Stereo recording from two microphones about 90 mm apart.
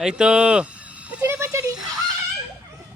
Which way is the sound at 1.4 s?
35° right (ahead or behind).